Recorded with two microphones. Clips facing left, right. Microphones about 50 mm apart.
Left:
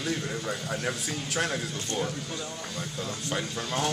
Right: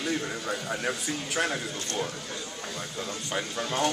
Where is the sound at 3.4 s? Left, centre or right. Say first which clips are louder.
Right 3 dB; centre.